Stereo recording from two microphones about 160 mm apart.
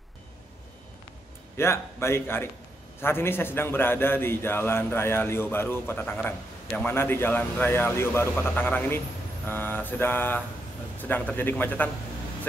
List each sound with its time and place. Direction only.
1.6 s a man's voice: 15° left (ahead or behind)